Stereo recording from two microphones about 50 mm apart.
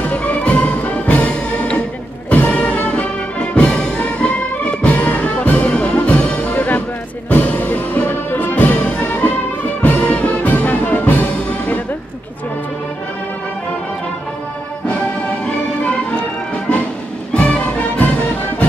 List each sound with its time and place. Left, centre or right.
0.0 s music: left
15.4 s music: left